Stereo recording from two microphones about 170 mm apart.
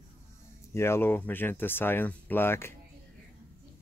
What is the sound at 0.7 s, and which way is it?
Speech, 15° left (ahead or behind).